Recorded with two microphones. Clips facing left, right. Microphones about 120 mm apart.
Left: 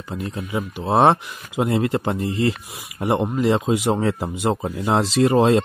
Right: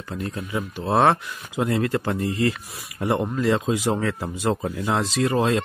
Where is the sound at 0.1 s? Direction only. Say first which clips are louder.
Left 2 dB; 20° left (ahead or behind).